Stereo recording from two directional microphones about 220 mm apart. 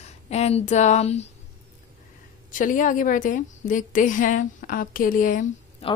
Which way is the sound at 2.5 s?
35° left (ahead or behind).